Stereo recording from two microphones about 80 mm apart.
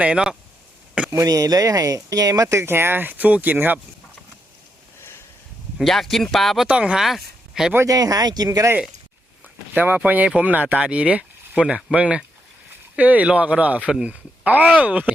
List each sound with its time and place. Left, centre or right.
0.0 s speech: centre
1.1 s speech: right
5.7 s speech: centre
6.7 s speech: centre
7.9 s speech: right
9.7 s speech: centre